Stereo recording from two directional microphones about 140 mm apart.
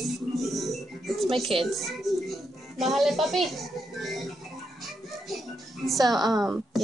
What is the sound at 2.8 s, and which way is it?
Speech, centre (ahead or behind).